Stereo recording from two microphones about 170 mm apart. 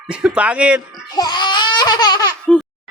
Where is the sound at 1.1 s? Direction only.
25° left (ahead or behind).